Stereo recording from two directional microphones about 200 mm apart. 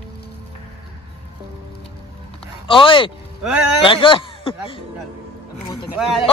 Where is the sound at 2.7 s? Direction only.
25° left (ahead or behind).